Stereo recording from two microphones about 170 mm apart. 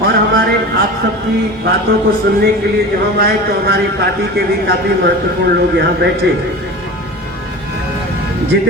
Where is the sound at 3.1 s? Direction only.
70° right (ahead or behind).